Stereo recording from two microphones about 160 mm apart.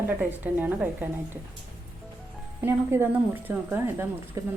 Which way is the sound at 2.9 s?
15° right (ahead or behind).